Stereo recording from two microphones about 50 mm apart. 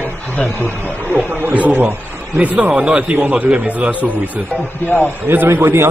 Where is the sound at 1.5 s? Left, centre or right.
Right.